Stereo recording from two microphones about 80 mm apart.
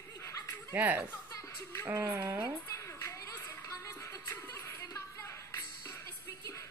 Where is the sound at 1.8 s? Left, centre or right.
Right.